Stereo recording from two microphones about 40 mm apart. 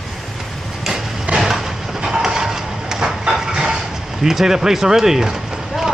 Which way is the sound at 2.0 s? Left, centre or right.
Centre.